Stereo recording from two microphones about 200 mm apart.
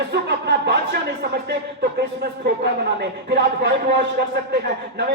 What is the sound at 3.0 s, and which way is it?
A man's voice, 55° right (ahead or behind).